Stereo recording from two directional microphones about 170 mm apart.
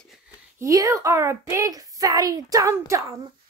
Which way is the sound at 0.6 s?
20° right (ahead or behind).